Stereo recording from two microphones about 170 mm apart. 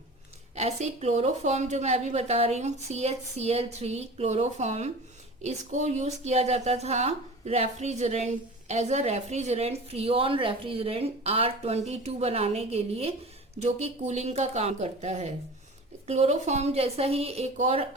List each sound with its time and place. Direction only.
0.5 s a woman's voice: 40° right (ahead or behind)